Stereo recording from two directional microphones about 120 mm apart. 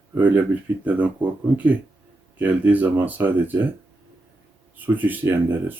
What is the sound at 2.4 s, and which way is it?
Speech, 10° right (ahead or behind).